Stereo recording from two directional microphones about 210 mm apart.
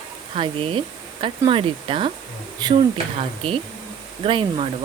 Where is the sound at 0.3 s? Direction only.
25° right (ahead or behind).